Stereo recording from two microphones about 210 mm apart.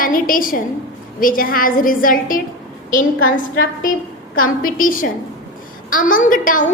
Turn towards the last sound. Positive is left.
turn(degrees=40)  # may be behind; listen again after turning